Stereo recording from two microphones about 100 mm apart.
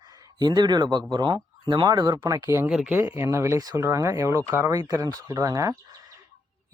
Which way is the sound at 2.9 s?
25° right (ahead or behind).